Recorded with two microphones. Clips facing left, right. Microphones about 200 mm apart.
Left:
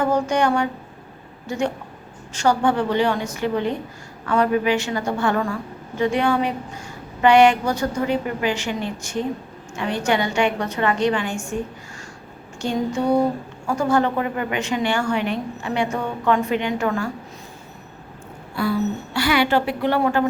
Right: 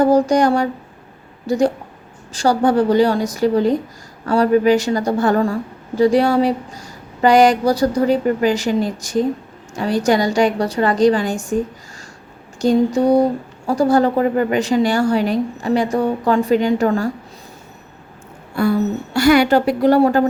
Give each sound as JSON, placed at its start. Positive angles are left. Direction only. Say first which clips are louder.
{"t": 0.0, "sound": "a woman's voice", "louder": "right 6 dB", "side_deg": -35}
{"t": 12.6, "sound": "a woman's voice", "louder": "right 7 dB", "side_deg": -40}
{"t": 18.5, "sound": "a woman's voice", "louder": "right 5 dB", "side_deg": -45}